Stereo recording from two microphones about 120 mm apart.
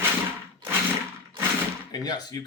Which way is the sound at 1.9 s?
35° left (ahead or behind).